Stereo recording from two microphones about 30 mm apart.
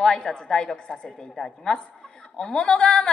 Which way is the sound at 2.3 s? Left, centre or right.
Left.